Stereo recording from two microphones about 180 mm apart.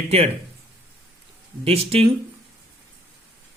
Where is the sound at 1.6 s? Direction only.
35° right (ahead or behind).